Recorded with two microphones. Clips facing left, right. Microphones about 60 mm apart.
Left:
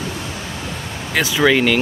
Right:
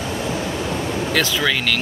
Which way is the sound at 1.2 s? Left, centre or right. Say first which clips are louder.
Left 8 dB; centre.